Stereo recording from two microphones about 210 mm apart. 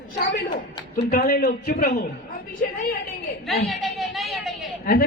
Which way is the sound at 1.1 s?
45° left (ahead or behind).